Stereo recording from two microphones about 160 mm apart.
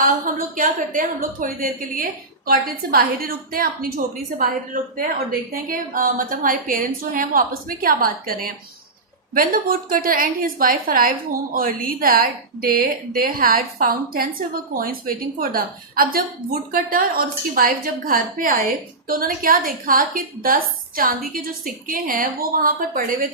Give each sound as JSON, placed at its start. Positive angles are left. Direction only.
{"t": 0.0, "sound": "a woman's voice", "side_deg": -55}